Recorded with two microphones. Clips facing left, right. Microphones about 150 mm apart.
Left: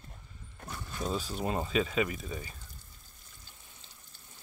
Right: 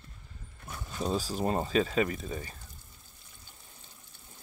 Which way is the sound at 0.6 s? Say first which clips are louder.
Even; 5° right (ahead or behind).